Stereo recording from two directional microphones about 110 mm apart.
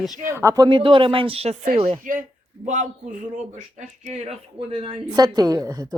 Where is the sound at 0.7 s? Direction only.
50° right (ahead or behind); by 1.9 s 70° right (ahead or behind).